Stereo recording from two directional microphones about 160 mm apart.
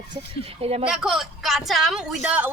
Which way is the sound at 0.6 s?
40° right (ahead or behind).